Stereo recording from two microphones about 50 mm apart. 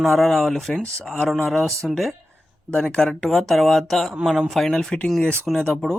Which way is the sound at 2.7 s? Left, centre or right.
Centre.